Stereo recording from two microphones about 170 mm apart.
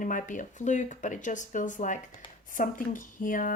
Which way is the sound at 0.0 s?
50° left (ahead or behind).